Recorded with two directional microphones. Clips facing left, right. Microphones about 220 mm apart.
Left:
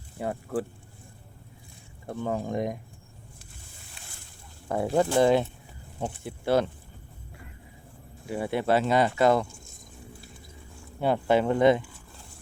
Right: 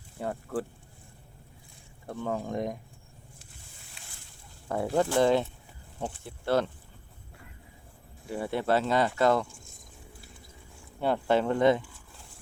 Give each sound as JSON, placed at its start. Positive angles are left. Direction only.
{"t": 0.2, "sound": "speech", "side_deg": 15}
{"t": 2.2, "sound": "speech", "side_deg": 15}
{"t": 4.7, "sound": "speech", "side_deg": 20}
{"t": 5.2, "sound": "speech", "side_deg": 15}
{"t": 8.3, "sound": "speech", "side_deg": 15}
{"t": 11.0, "sound": "speech", "side_deg": 10}